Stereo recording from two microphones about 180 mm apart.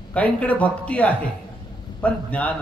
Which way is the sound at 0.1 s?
10° left (ahead or behind).